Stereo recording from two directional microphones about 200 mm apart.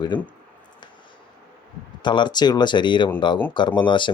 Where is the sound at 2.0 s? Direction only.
20° left (ahead or behind).